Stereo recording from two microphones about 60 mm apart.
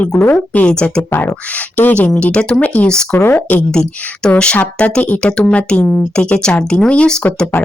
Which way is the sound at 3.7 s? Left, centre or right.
Centre.